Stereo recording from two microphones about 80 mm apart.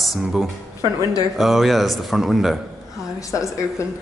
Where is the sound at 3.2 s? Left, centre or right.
Left.